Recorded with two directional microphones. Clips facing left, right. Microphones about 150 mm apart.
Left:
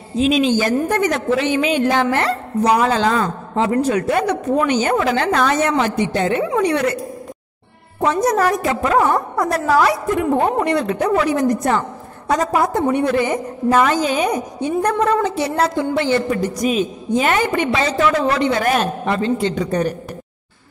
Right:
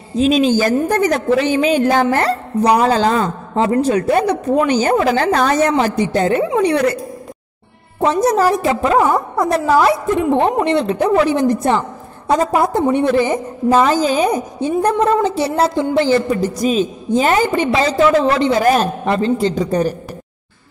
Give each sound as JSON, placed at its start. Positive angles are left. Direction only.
{"t": 0.2, "sound": "a woman's voice", "side_deg": -40}
{"t": 8.0, "sound": "a woman's voice", "side_deg": -30}